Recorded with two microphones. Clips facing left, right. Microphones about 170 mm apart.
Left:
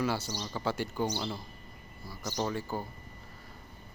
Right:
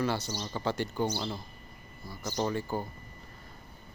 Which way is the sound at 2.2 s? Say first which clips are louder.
Right 2 dB; 5° right (ahead or behind).